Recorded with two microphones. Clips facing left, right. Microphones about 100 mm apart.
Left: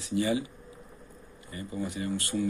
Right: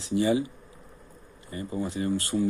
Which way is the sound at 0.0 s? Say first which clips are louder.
Right 4 dB; 30° right (ahead or behind).